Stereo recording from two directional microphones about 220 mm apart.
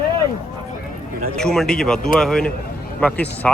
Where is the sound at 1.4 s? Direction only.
Centre (ahead or behind).